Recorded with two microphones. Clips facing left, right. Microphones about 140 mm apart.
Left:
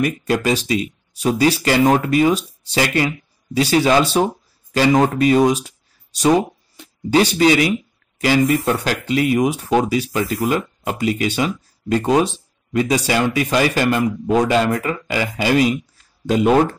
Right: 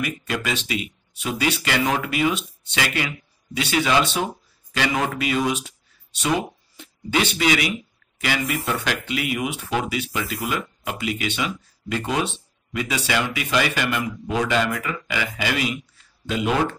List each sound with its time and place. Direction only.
0.0 s speech: 40° left (ahead or behind)